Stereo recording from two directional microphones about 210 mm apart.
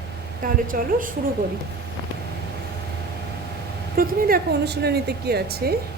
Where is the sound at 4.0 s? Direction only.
45° right (ahead or behind).